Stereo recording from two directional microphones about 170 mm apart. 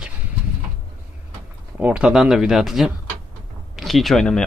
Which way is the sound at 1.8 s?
5° right (ahead or behind).